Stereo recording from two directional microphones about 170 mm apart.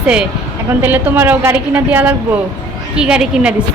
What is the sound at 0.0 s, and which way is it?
A woman's voice, 5° right (ahead or behind).